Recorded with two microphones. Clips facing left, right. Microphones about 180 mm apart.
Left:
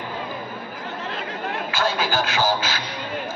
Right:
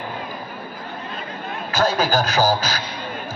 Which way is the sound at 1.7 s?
40° right (ahead or behind).